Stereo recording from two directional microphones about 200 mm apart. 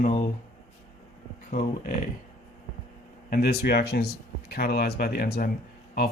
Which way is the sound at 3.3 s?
50° left (ahead or behind).